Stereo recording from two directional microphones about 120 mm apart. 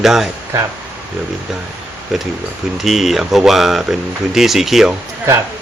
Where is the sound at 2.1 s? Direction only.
Centre (ahead or behind).